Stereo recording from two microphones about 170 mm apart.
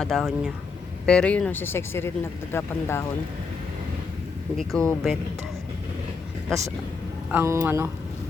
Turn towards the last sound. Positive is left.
turn(degrees=-15)  # may be behind; listen again after turning